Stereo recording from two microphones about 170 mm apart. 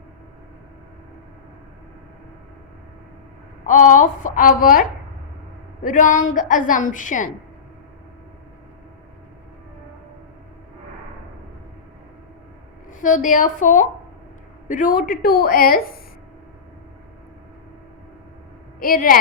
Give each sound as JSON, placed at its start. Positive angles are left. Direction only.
{"t": 3.7, "sound": "a woman's voice", "side_deg": 50}
{"t": 13.0, "sound": "a woman's voice", "side_deg": 50}
{"t": 18.8, "sound": "a woman's voice", "side_deg": 55}